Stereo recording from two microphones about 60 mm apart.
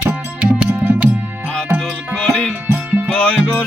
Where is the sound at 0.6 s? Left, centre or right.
Right.